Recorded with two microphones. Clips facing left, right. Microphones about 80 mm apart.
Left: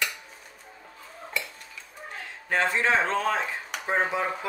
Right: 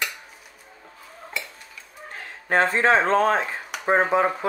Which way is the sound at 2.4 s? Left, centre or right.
Right.